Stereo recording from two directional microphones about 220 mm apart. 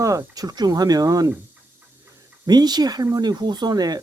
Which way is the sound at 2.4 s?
20° right (ahead or behind).